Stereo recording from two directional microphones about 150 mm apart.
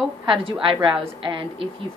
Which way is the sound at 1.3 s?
35° right (ahead or behind).